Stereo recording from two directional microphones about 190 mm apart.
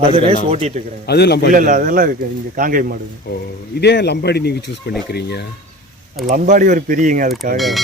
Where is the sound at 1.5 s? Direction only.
45° right (ahead or behind).